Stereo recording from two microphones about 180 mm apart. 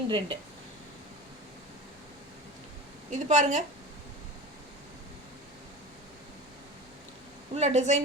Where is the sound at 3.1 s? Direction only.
40° right (ahead or behind).